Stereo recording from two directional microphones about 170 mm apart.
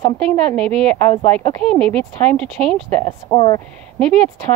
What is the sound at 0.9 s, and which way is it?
Speech, 10° left (ahead or behind).